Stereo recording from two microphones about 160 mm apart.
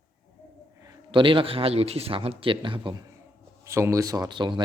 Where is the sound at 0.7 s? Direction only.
25° right (ahead or behind).